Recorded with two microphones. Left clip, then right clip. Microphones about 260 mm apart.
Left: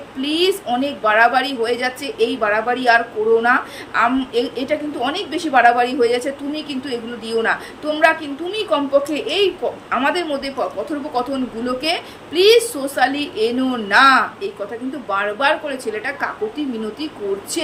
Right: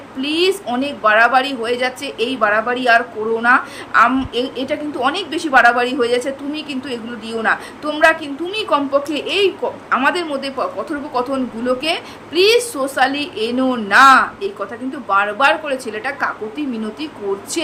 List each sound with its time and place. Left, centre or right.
0.2 s a woman's voice: centre